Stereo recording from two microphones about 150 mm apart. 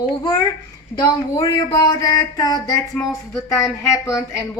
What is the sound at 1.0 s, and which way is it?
Speech, 25° left (ahead or behind).